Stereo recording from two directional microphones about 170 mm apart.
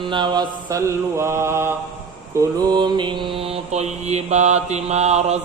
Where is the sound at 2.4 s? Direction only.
25° right (ahead or behind); by 5.3 s 40° right (ahead or behind).